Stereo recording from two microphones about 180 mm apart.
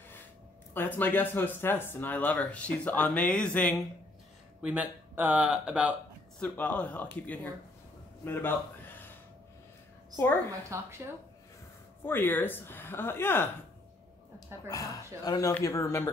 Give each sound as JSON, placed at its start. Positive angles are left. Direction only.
{"t": 0.7, "sound": "speech", "side_deg": 10}
{"t": 4.6, "sound": "speech", "side_deg": -5}
{"t": 6.4, "sound": "speech", "side_deg": 10}
{"t": 10.7, "sound": "speech", "side_deg": -15}
{"t": 12.0, "sound": "speech", "side_deg": 10}
{"t": 14.7, "sound": "speech", "side_deg": 20}